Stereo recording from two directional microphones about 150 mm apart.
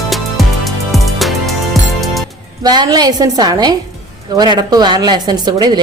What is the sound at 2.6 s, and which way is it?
A woman's voice, 25° right (ahead or behind).